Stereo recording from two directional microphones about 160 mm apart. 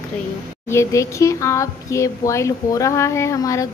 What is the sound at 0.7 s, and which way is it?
A child's voice, 20° left (ahead or behind).